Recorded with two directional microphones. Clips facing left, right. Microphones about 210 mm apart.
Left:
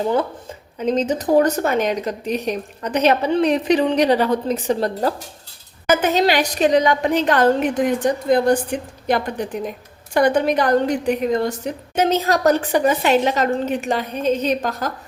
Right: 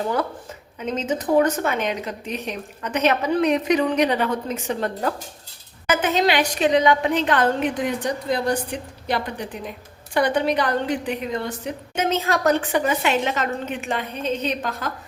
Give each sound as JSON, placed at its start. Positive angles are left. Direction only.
{"t": 0.8, "sound": "a woman's voice", "side_deg": 35}